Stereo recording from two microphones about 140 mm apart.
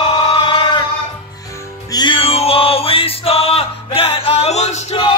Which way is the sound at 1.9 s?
35° left (ahead or behind).